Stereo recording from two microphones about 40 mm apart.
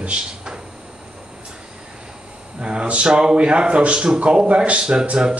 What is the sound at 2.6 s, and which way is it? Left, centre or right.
Speech, right.